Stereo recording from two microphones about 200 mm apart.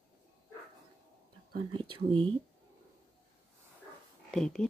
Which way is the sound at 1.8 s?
25° right (ahead or behind).